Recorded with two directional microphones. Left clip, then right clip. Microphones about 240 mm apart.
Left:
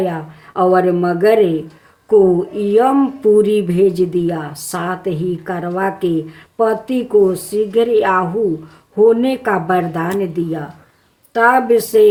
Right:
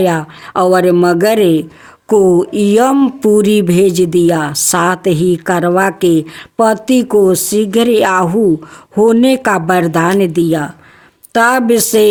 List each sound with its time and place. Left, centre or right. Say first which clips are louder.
0.0 s speech: right 7 dB; right